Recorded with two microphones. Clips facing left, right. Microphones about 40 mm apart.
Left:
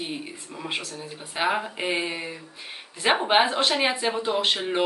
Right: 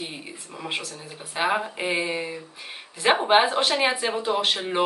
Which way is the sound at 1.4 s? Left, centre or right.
Centre.